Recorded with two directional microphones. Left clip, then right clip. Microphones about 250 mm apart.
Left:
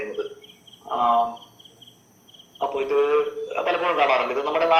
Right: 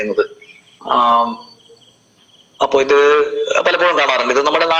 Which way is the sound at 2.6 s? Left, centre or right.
Right.